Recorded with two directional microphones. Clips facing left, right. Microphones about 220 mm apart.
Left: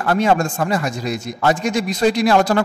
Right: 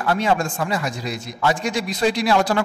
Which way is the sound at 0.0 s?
45° left (ahead or behind).